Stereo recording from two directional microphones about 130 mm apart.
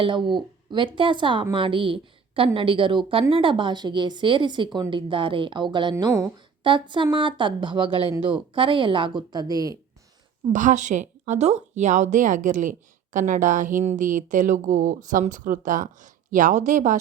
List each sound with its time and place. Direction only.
0.0 s a woman's voice: 40° right (ahead or behind)
10.5 s speech: 70° right (ahead or behind)